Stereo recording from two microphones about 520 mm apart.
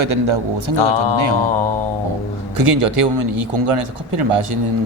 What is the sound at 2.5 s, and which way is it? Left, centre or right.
Speech, right.